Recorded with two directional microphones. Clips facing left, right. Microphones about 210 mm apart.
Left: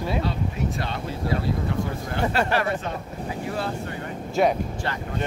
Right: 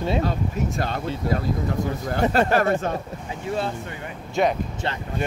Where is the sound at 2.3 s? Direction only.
45° right (ahead or behind).